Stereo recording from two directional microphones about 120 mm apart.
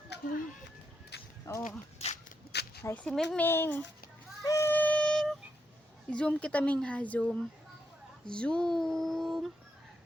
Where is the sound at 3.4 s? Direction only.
20° left (ahead or behind).